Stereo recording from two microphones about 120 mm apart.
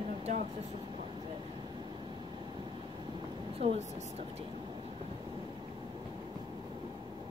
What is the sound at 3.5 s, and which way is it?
Speech, 55° right (ahead or behind).